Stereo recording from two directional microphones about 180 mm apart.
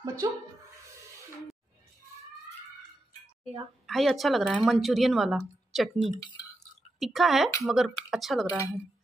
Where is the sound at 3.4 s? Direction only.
35° right (ahead or behind).